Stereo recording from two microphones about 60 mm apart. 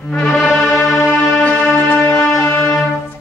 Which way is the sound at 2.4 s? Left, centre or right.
Left.